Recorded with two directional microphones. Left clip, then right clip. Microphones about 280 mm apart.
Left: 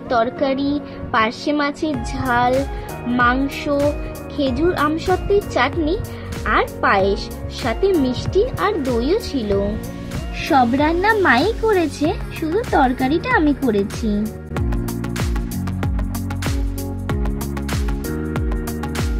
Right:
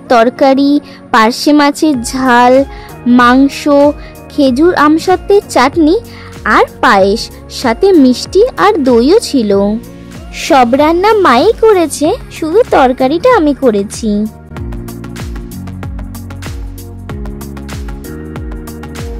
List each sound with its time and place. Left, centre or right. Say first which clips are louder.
0.1 s speech: right 11 dB; right
14.5 s music: even; centre
17.1 s music: right 2 dB; centre